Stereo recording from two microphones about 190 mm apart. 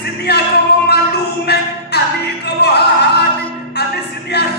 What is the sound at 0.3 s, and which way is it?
Music, 60° left (ahead or behind).